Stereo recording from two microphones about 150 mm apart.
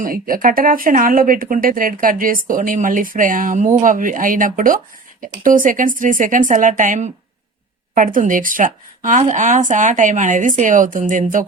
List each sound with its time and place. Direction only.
0.0 s speech: 65° right (ahead or behind)